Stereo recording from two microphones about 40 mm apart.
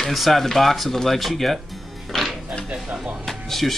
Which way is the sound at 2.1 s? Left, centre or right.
Centre.